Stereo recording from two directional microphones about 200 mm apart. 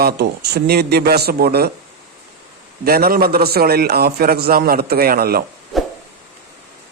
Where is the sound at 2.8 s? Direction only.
50° right (ahead or behind).